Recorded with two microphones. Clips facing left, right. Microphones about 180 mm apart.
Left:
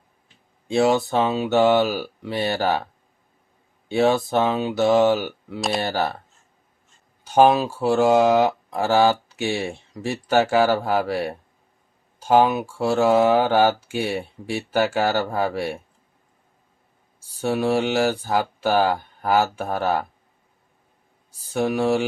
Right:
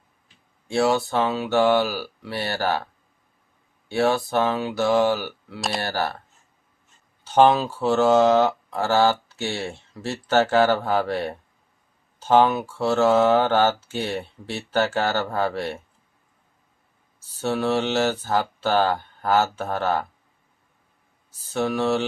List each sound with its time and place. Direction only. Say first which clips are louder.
0.7 s speech: left 2 dB; 20° left (ahead or behind)
5.5 s speech: left 4 dB; centre (ahead or behind)
5.8 s speech: left 2 dB; 15° left (ahead or behind)
7.3 s speech: left 1 dB; 10° left (ahead or behind)
17.2 s speech: left 2 dB; 10° left (ahead or behind)
21.2 s speech: left 2 dB; 10° left (ahead or behind)